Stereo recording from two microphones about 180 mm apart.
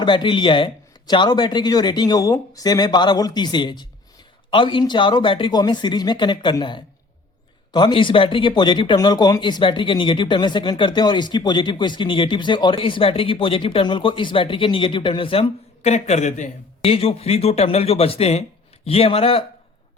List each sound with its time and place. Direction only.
0.0 s speech: 25° left (ahead or behind)